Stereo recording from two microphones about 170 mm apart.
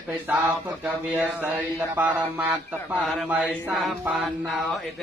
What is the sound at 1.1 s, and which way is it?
Mantra, 10° right (ahead or behind).